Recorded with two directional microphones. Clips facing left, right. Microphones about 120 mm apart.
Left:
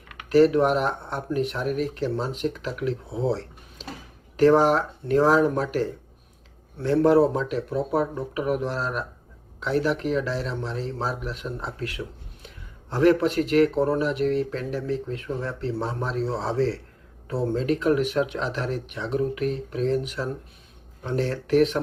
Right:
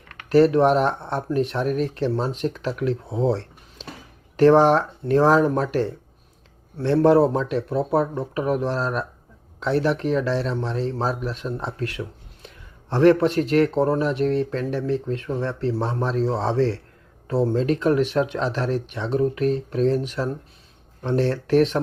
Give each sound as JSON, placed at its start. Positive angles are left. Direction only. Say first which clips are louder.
{"t": 0.3, "sound": "speech", "louder": "right 2 dB", "side_deg": -35}
{"t": 4.4, "sound": "speech", "louder": "right 3 dB", "side_deg": -35}
{"t": 7.0, "sound": "speech", "louder": "right 2 dB", "side_deg": -35}
{"t": 13.0, "sound": "speech", "louder": "right 3 dB", "side_deg": -40}